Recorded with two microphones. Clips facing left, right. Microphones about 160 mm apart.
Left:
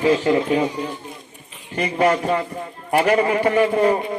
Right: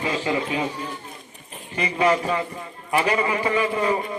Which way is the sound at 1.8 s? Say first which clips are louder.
Left 2 dB; 50° left (ahead or behind).